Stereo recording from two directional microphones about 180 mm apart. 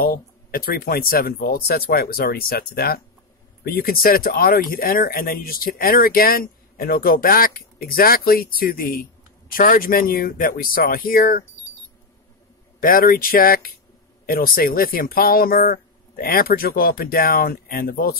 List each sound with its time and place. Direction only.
0.0 s speech: 55° left (ahead or behind)
12.8 s speech: 55° left (ahead or behind)